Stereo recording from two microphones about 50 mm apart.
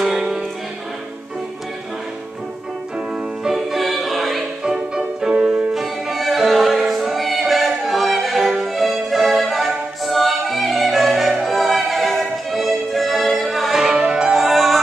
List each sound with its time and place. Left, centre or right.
0.0 s music: centre
3.4 s music: centre
4.6 s music: centre
13.7 s music: centre
14.3 s music: centre